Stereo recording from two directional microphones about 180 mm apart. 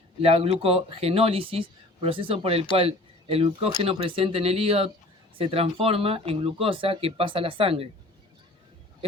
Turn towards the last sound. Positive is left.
turn(degrees=-30)  # may be behind; listen again after turning